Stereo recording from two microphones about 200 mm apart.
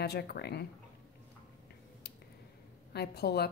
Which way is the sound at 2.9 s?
55° left (ahead or behind).